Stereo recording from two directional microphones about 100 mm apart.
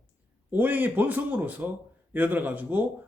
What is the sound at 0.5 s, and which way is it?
A man's voice, 15° right (ahead or behind).